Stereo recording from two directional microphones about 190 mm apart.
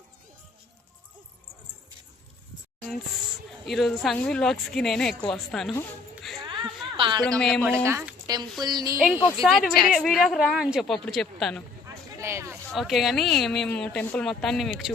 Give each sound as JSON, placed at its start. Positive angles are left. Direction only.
{"t": 3.7, "sound": "a woman's voice", "side_deg": 0}
{"t": 6.5, "sound": "a sound", "side_deg": -25}
{"t": 7.3, "sound": "a woman's voice", "side_deg": 5}
{"t": 7.9, "sound": "speech", "side_deg": -15}
{"t": 9.0, "sound": "a woman's voice", "side_deg": -5}
{"t": 12.2, "sound": "a sound", "side_deg": -15}
{"t": 12.7, "sound": "a woman's voice", "side_deg": 0}